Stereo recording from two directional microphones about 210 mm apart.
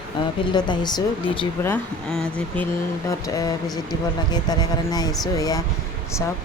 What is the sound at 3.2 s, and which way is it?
Speech, 15° left (ahead or behind).